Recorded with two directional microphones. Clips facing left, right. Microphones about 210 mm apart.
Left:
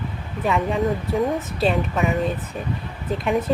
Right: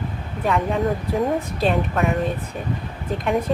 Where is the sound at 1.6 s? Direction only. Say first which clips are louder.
Left 1 dB; centre (ahead or behind).